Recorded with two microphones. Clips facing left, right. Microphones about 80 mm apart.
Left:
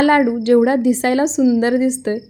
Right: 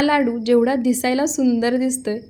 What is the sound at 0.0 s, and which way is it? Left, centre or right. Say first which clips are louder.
A woman's voice: left 4 dB; left.